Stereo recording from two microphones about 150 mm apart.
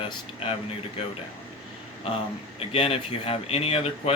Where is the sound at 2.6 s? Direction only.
40° left (ahead or behind).